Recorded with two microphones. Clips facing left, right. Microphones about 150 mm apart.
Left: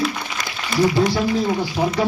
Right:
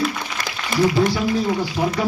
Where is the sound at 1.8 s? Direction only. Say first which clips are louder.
Left 1 dB; 10° left (ahead or behind).